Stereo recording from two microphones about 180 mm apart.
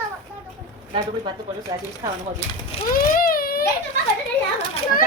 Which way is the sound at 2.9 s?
55° left (ahead or behind).